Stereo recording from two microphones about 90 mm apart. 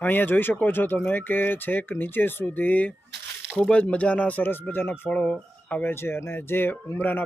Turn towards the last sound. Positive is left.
turn(degrees=20)  # may be behind; listen again after turning